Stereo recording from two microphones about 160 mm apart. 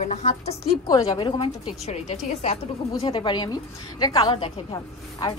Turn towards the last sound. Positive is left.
turn(degrees=25)  # may be behind; listen again after turning